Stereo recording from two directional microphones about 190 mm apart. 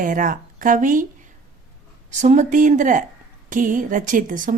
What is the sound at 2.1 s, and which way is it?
A woman's voice, 40° right (ahead or behind).